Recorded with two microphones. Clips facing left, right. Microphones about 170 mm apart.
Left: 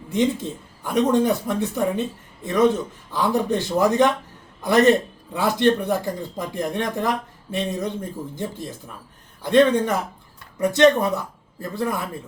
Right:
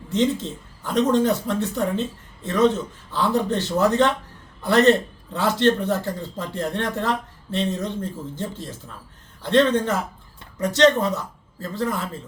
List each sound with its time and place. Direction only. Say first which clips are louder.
0.1 s speech: even; 15° left (ahead or behind)